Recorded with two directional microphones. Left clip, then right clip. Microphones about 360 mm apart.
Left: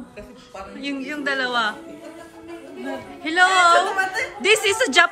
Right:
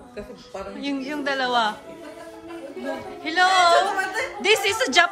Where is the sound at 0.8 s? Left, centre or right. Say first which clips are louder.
Left 1 dB; centre.